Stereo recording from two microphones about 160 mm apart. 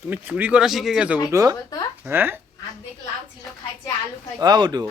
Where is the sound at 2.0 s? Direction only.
10° right (ahead or behind).